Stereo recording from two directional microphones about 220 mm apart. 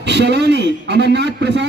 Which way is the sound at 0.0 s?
50° right (ahead or behind).